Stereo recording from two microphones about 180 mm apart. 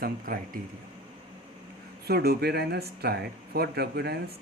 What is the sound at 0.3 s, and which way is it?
Speech, 50° right (ahead or behind).